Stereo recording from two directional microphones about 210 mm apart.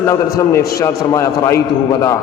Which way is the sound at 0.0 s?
10° left (ahead or behind).